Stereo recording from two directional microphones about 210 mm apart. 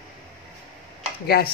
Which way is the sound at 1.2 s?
50° left (ahead or behind).